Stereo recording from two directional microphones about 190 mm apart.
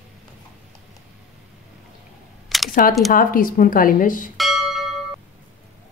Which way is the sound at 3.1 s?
45° left (ahead or behind).